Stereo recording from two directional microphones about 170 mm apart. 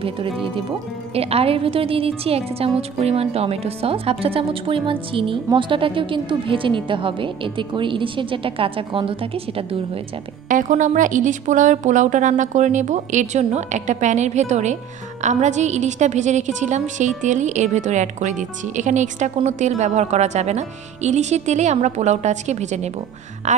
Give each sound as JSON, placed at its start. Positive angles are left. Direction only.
{"t": 0.0, "sound": "speech", "side_deg": -30}
{"t": 10.5, "sound": "a woman's voice", "side_deg": -50}